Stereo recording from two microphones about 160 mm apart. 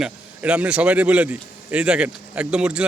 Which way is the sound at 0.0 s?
5° right (ahead or behind).